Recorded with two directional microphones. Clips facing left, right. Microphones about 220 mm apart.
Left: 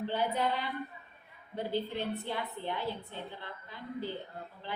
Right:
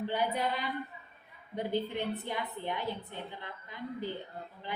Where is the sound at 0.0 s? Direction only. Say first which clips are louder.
Even; 15° right (ahead or behind).